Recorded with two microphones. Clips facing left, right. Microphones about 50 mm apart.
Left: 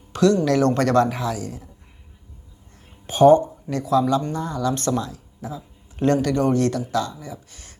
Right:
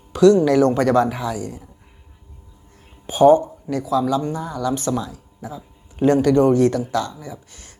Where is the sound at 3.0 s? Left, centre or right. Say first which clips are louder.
Right 1 dB; centre.